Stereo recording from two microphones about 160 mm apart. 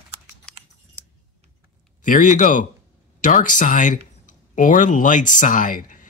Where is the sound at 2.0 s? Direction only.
55° left (ahead or behind).